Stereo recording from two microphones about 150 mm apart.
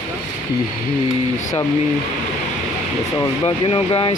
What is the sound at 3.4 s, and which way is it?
Speech, 35° left (ahead or behind).